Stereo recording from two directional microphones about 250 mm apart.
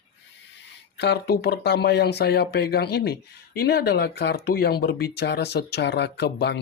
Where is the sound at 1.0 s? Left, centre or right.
Left.